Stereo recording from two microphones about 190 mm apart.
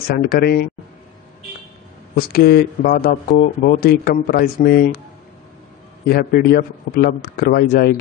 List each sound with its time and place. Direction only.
0.1 s speech: 55° left (ahead or behind)
2.1 s speech: 55° left (ahead or behind)
6.0 s speech: 55° left (ahead or behind)